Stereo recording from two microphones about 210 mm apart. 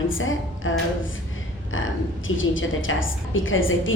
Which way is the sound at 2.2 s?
65° left (ahead or behind).